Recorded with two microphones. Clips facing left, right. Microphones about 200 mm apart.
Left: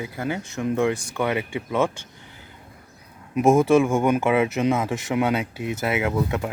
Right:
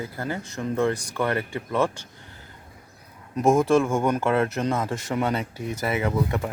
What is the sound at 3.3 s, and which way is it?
Speech, 5° left (ahead or behind).